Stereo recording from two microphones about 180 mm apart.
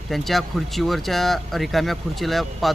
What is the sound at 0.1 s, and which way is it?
Speech, centre (ahead or behind).